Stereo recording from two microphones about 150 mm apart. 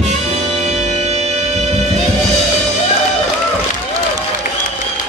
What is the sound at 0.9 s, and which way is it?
Music, 50° right (ahead or behind).